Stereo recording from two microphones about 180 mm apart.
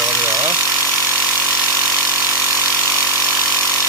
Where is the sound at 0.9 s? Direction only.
15° left (ahead or behind).